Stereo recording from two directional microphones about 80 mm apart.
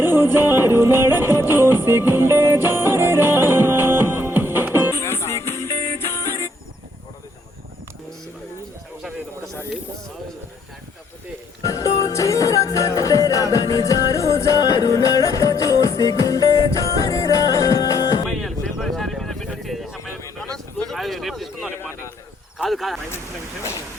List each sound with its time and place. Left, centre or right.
0.0 s music: right
4.9 s music: left
11.6 s music: left
18.8 s vehicle: centre
20.9 s a sound: centre